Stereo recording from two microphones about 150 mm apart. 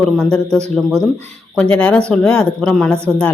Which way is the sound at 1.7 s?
5° left (ahead or behind).